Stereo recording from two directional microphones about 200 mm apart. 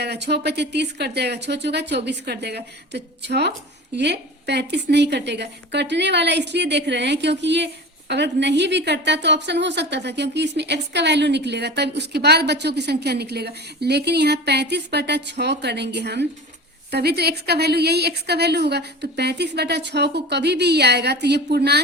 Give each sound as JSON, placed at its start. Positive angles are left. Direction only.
{"t": 0.0, "sound": "a woman's voice", "side_deg": -55}